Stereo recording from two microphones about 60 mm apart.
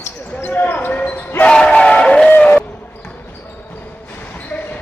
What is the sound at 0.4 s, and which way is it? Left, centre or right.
Basketball bounce, left.